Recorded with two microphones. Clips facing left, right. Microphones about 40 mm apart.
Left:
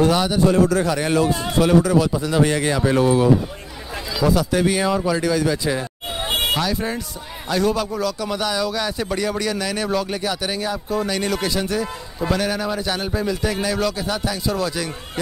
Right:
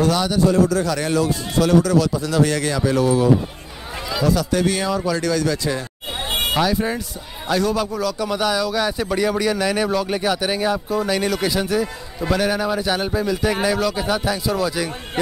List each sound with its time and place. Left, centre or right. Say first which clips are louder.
0.0 s speech: left 1 dB; centre
0.5 s a man's voice: left 1 dB; left
0.8 s speech: left 1 dB; left
4.2 s speech: left 1 dB; centre
6.5 s speech: right 2 dB; centre